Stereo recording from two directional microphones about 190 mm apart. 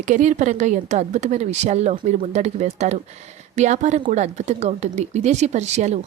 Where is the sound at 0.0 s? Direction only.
40° right (ahead or behind).